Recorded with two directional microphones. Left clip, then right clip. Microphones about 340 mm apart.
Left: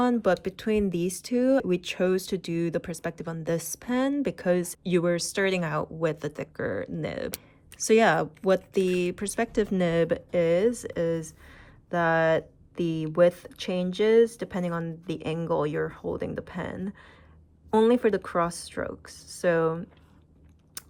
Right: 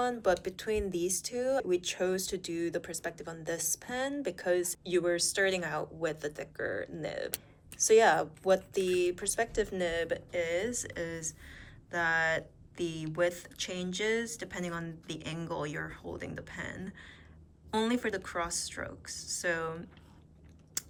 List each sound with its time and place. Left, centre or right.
0.0 s speech: centre
20.8 s biting: centre